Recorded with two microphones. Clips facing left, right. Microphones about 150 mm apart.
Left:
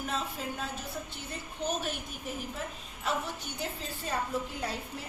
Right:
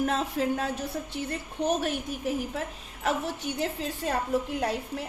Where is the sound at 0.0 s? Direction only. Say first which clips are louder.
Right 8 dB; 75° right (ahead or behind).